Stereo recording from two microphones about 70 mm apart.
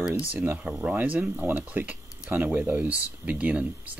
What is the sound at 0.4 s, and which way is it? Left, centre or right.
Speech, right.